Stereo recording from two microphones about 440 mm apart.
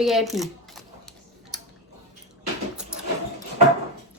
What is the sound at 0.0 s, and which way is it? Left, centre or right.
Speech, centre.